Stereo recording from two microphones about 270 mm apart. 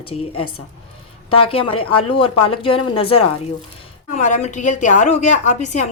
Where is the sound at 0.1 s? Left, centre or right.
Centre.